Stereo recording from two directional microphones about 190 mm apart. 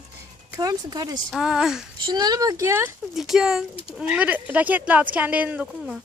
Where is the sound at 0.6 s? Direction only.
20° right (ahead or behind).